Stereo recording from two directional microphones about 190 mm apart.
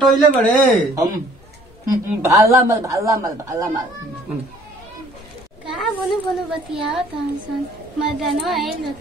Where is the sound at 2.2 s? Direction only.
15° right (ahead or behind).